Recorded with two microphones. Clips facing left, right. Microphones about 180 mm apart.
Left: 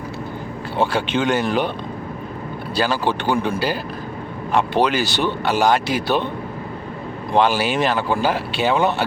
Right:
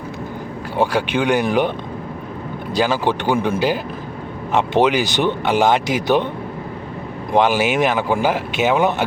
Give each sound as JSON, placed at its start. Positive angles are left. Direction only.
{"t": 0.8, "sound": "speech", "side_deg": -10}
{"t": 2.7, "sound": "speech", "side_deg": -15}
{"t": 7.3, "sound": "speech", "side_deg": -15}